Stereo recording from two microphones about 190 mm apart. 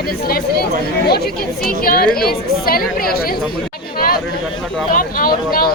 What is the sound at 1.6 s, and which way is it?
A woman's voice, 50° left (ahead or behind).